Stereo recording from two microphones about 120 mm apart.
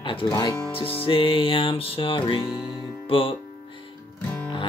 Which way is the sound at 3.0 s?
50° left (ahead or behind).